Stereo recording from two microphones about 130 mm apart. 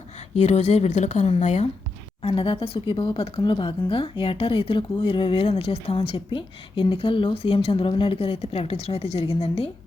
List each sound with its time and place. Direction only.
0.3 s speech: 60° left (ahead or behind)
2.2 s speech: 45° left (ahead or behind)